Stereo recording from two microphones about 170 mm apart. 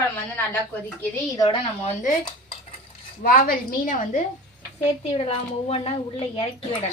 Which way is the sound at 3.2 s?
55° left (ahead or behind).